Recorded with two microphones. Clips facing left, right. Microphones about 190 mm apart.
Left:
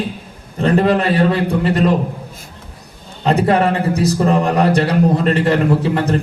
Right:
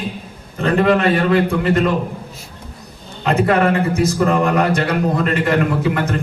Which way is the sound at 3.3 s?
35° left (ahead or behind).